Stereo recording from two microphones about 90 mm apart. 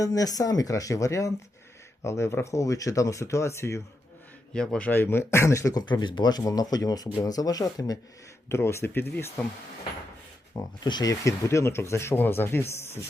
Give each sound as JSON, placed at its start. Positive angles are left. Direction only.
{"t": 0.0, "sound": "speech", "side_deg": 40}
{"t": 4.5, "sound": "a man's voice", "side_deg": 10}
{"t": 4.9, "sound": "speech", "side_deg": 25}
{"t": 5.9, "sound": "speech", "side_deg": 55}
{"t": 6.4, "sound": "speech", "side_deg": 45}
{"t": 8.4, "sound": "speech", "side_deg": 30}
{"t": 10.5, "sound": "speech", "side_deg": 50}
{"t": 11.1, "sound": "speech", "side_deg": 35}